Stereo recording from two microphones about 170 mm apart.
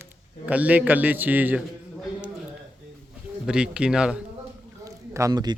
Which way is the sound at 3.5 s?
5° right (ahead or behind).